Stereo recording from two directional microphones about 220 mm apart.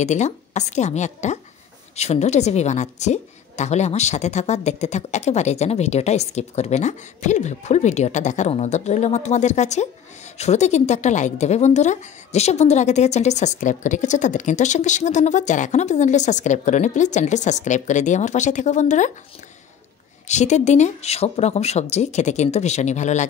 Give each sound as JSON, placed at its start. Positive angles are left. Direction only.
{"t": 0.0, "sound": "a woman's voice", "side_deg": 30}
{"t": 20.2, "sound": "a woman's voice", "side_deg": 30}